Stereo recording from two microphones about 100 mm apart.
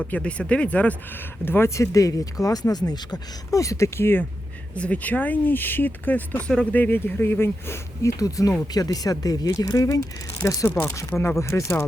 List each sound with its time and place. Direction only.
0.1 s speech: 10° left (ahead or behind)
1.5 s speech: 25° left (ahead or behind)
11.1 s speech: 15° left (ahead or behind)
11.3 s speech: 30° left (ahead or behind)